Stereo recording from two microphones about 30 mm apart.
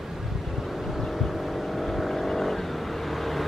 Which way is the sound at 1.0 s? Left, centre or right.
Centre.